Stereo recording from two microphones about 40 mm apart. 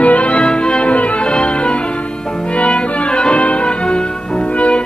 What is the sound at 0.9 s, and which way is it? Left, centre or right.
Music, left.